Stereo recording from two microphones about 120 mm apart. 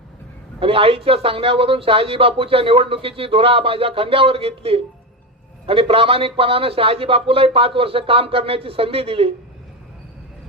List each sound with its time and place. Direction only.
0.6 s speech: 50° right (ahead or behind)